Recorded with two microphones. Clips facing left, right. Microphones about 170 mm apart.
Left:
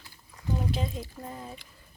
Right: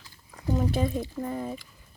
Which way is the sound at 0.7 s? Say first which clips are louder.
Right 6 dB; 50° right (ahead or behind).